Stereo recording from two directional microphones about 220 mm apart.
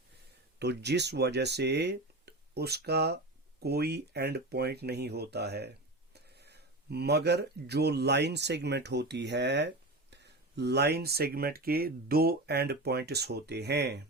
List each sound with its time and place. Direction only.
0.6 s speech: 50° right (ahead or behind)